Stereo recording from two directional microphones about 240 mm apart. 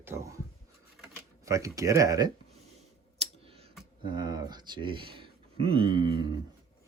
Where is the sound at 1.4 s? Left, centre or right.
Centre.